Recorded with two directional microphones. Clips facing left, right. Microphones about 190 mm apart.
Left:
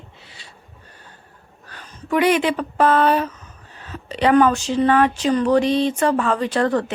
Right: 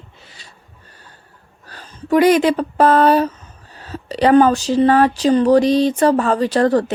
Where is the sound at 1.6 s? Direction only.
35° right (ahead or behind).